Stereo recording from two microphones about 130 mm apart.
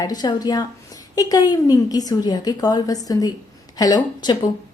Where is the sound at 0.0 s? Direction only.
30° left (ahead or behind).